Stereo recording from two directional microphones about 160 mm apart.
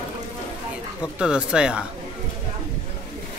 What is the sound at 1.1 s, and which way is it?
Speech, 5° right (ahead or behind).